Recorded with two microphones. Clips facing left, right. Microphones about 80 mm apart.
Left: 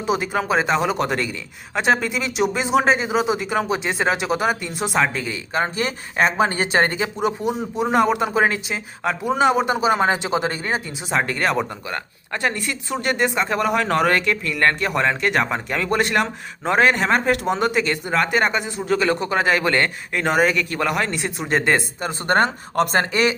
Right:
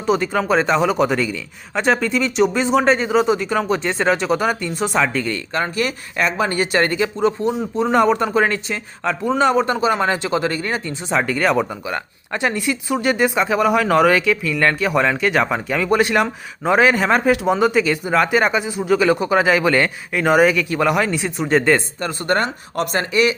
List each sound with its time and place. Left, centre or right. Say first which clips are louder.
0.0 s speech: right 3 dB; centre
5.5 s speech: even; left
11.1 s speech: right 3 dB; centre
11.9 s speech: right 3 dB; centre
22.3 s speech: left 2 dB; left